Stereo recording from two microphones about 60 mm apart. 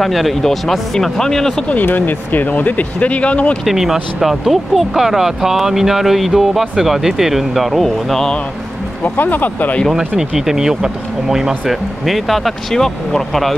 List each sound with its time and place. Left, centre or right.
0.0 s speech: centre
1.9 s speech: left
3.6 s speech: centre
9.0 s speech: left
9.9 s speech: centre